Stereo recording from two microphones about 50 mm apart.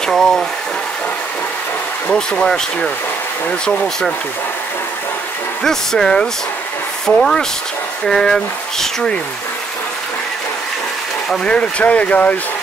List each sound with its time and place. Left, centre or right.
0.0 s speech: centre
2.1 s speech: centre
5.6 s speech: centre
11.4 s speech: left